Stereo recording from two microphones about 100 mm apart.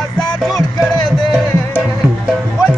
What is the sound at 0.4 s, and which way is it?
Music, centre (ahead or behind).